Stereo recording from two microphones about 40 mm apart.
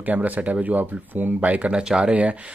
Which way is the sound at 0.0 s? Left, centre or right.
Right.